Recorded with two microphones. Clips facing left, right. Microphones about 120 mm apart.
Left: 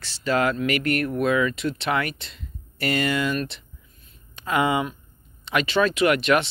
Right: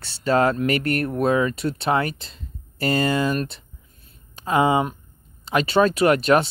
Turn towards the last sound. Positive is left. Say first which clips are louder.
# right 3 dB
turn(degrees=-35)  # may be behind; listen again after turning